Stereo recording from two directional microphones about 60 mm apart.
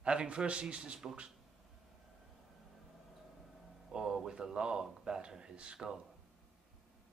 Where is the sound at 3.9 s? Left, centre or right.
Centre.